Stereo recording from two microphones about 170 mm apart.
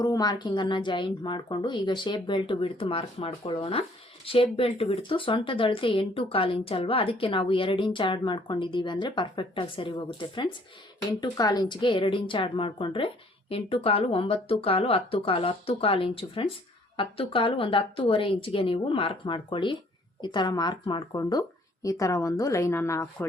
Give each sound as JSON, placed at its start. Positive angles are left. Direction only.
{"t": 0.0, "sound": "a woman's voice", "side_deg": 20}